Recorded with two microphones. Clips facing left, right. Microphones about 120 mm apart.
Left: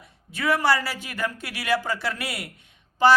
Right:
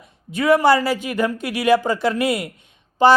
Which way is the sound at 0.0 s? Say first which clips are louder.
Right 7 dB; 20° right (ahead or behind).